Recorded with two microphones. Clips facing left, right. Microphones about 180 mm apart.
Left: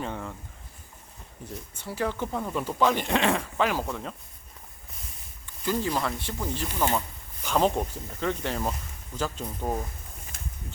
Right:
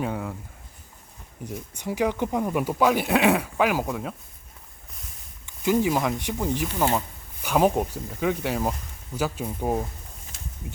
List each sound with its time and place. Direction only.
0.0 s speech: 5° right (ahead or behind)
1.4 s speech: 15° right (ahead or behind)
5.6 s speech: 15° right (ahead or behind)
10.3 s a sound: 55° left (ahead or behind)